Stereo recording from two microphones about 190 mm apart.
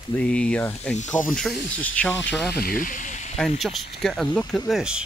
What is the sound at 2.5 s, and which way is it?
Speech, 50° left (ahead or behind).